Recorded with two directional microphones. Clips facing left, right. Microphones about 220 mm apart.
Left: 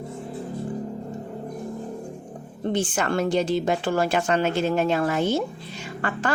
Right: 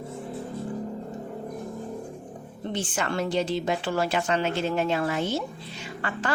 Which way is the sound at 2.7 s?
50° left (ahead or behind).